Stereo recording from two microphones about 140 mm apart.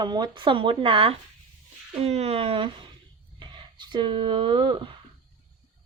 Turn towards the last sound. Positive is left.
turn(degrees=-35)  # may be behind; listen again after turning